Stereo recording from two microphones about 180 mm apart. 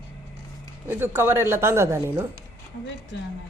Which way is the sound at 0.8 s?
10° right (ahead or behind).